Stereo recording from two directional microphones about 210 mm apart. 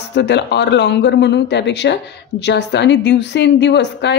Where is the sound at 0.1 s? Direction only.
55° left (ahead or behind).